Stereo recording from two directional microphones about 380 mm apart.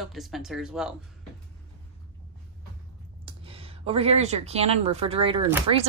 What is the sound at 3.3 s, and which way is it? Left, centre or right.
A woman's voice, centre.